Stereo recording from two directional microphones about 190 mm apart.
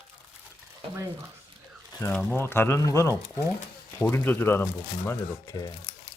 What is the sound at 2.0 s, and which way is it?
Speech, 10° left (ahead or behind).